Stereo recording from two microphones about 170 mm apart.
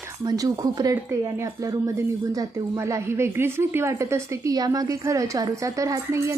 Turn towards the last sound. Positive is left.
turn(degrees=-20)  # may be behind; listen again after turning